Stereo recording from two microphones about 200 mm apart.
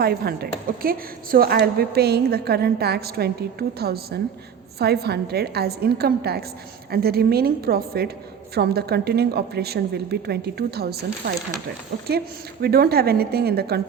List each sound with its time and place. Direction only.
0.0 s a woman's voice: 50° right (ahead or behind)
12.6 s a woman's voice: 50° right (ahead or behind)